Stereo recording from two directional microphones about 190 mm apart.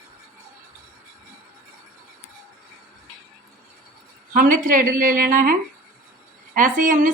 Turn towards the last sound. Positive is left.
turn(degrees=-45)  # may be behind; listen again after turning